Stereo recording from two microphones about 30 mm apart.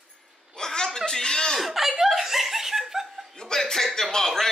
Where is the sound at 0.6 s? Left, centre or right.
Left.